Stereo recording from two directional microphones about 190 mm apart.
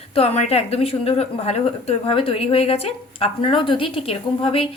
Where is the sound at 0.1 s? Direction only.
35° left (ahead or behind).